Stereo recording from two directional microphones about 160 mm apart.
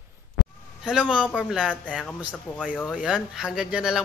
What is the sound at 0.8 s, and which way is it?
Speech, 5° right (ahead or behind).